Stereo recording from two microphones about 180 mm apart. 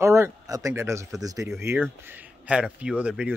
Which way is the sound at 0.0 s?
15° right (ahead or behind).